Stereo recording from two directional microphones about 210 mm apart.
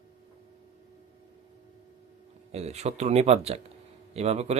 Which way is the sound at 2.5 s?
30° right (ahead or behind).